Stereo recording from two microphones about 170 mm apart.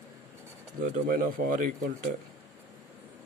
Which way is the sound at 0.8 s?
55° right (ahead or behind).